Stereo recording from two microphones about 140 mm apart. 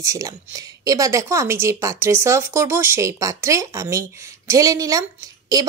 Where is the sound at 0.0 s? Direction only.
25° right (ahead or behind).